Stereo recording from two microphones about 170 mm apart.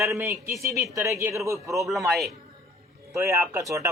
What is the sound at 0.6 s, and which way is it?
A man's voice, 20° right (ahead or behind).